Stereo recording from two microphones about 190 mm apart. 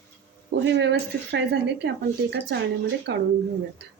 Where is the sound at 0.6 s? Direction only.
70° right (ahead or behind).